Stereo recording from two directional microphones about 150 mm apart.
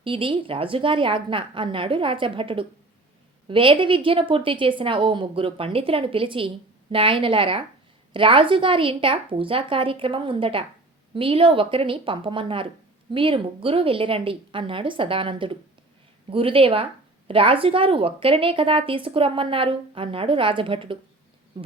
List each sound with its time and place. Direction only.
0.0 s speech: 35° right (ahead or behind)